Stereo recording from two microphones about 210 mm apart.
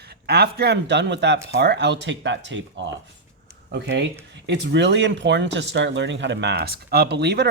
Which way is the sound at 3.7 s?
55° right (ahead or behind).